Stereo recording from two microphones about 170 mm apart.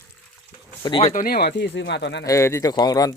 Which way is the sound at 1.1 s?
60° left (ahead or behind).